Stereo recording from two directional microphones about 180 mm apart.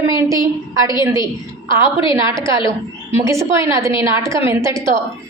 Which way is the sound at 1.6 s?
30° left (ahead or behind).